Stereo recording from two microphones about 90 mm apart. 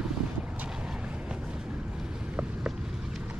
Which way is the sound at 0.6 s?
10° right (ahead or behind).